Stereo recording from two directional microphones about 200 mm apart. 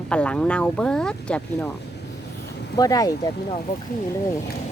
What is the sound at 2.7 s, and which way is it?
Speech, 20° left (ahead or behind).